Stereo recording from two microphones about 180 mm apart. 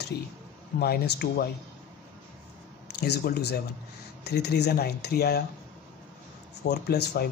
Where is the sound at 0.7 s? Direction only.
65° left (ahead or behind).